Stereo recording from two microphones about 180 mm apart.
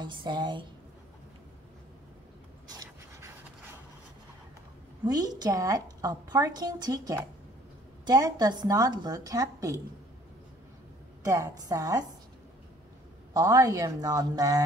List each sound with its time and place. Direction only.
0.0 s a woman's voice: 25° right (ahead or behind)
2.7 s pant: 20° right (ahead or behind)
5.0 s a woman's voice: 20° right (ahead or behind)
11.2 s a woman's voice: 20° right (ahead or behind)
13.3 s a woman's voice: 20° right (ahead or behind)